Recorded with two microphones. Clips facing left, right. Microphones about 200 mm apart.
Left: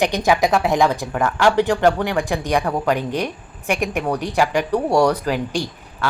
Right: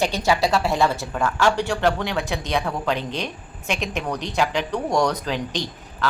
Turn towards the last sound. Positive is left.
turn(degrees=10)  # may be behind; listen again after turning